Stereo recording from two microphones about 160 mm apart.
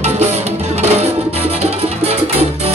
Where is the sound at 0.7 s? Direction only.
40° right (ahead or behind).